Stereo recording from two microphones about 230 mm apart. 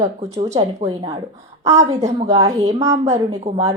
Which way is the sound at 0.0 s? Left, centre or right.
Centre.